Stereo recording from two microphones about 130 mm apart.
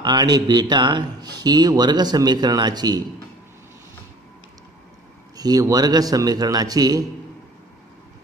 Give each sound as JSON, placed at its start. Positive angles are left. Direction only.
{"t": 0.0, "sound": "speech", "side_deg": -30}
{"t": 5.3, "sound": "a man's voice", "side_deg": -30}